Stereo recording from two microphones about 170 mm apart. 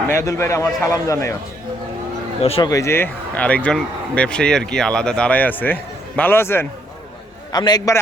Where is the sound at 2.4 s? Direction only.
35° left (ahead or behind).